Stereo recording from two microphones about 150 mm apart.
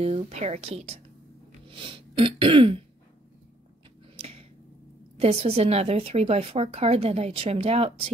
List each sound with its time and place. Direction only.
0.0 s a woman's voice: 40° right (ahead or behind)
1.7 s throat clearing: 35° right (ahead or behind)
4.2 s finger snapping: 40° right (ahead or behind)
5.1 s a woman's voice: 45° right (ahead or behind)